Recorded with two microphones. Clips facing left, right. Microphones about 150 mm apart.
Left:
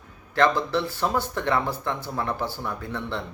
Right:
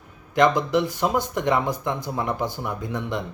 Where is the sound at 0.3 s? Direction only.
15° right (ahead or behind).